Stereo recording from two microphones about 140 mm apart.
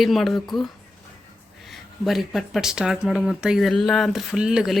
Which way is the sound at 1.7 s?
Centre (ahead or behind).